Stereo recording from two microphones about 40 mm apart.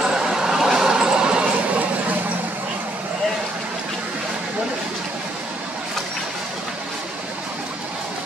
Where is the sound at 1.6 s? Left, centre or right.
Right.